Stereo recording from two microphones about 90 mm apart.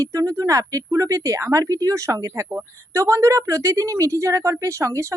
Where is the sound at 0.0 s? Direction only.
40° right (ahead or behind).